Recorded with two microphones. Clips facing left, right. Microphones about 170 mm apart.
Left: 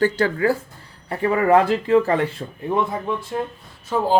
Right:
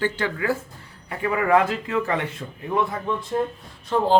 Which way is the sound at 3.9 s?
5° left (ahead or behind).